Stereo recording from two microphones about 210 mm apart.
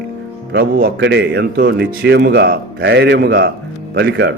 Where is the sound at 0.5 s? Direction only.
50° right (ahead or behind).